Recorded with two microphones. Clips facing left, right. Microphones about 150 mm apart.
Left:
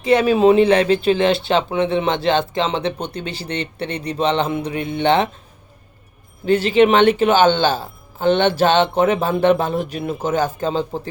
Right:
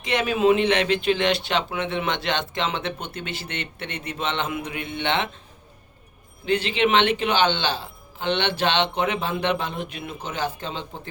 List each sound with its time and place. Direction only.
0.0 s speech: 35° left (ahead or behind)
6.4 s speech: 40° left (ahead or behind)